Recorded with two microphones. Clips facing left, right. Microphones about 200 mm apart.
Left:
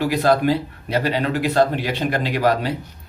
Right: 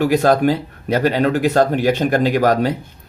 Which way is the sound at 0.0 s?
45° right (ahead or behind).